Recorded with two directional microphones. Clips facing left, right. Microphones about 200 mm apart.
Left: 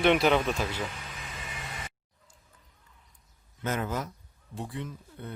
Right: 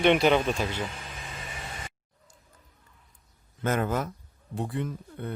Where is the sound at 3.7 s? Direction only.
55° right (ahead or behind).